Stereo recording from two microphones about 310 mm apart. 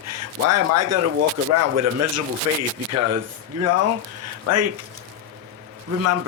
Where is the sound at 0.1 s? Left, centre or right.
Right.